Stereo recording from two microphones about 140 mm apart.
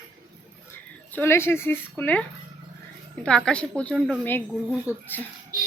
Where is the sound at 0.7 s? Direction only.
15° left (ahead or behind).